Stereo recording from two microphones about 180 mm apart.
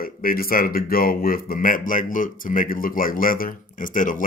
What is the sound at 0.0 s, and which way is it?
Speech, 55° left (ahead or behind).